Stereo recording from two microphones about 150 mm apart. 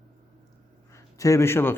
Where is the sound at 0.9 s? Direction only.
20° left (ahead or behind).